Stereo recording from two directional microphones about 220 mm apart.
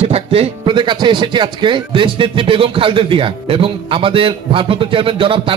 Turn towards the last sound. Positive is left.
turn(degrees=-25)  # may be behind; listen again after turning